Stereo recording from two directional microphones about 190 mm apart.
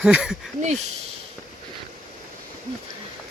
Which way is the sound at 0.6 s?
40° right (ahead or behind).